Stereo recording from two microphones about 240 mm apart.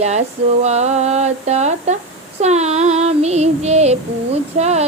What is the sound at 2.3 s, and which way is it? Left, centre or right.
Female singing, right.